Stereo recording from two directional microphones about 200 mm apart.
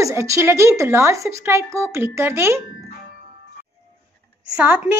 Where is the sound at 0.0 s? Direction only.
15° right (ahead or behind).